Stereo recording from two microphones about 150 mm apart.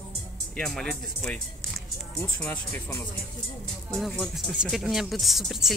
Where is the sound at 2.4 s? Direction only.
10° left (ahead or behind).